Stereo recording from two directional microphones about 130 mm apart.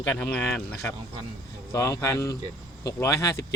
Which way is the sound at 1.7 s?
25° left (ahead or behind).